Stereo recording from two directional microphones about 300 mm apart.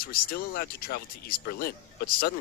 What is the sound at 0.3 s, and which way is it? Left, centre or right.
A man's voice, left.